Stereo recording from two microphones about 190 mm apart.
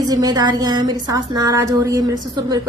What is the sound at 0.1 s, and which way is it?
A woman's voice, 20° right (ahead or behind).